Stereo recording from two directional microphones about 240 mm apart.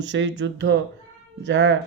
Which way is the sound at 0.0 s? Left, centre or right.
Right.